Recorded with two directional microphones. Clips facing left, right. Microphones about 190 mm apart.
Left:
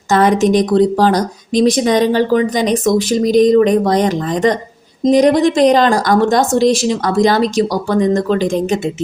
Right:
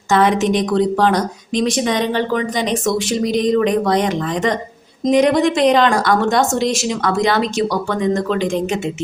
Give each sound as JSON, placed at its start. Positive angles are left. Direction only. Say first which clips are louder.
{"t": 0.1, "sound": "speech", "louder": "left 3 dB", "side_deg": 40}